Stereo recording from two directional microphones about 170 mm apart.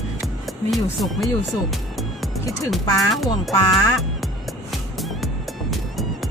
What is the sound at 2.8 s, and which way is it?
Speech, 20° left (ahead or behind).